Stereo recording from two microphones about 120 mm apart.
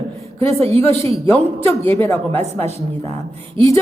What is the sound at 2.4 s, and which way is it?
Speech, 65° right (ahead or behind).